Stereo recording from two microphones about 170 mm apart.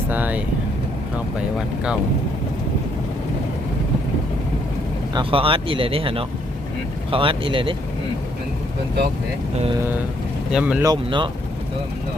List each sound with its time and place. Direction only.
0.1 s speech: 10° right (ahead or behind)
5.1 s speech: 30° right (ahead or behind)
10.5 s speech: 5° right (ahead or behind)
10.8 s speech: 30° right (ahead or behind)